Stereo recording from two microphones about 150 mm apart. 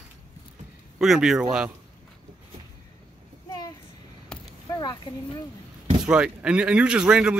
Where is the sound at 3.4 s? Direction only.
25° left (ahead or behind).